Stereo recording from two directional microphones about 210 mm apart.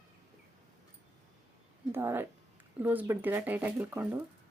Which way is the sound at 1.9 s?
10° right (ahead or behind).